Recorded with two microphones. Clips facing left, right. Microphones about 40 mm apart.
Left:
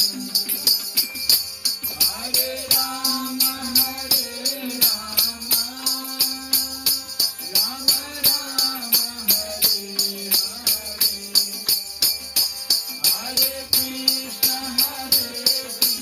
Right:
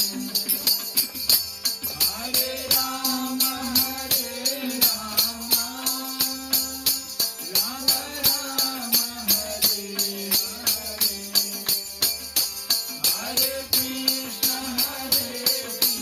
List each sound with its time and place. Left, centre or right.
0.0 s music: right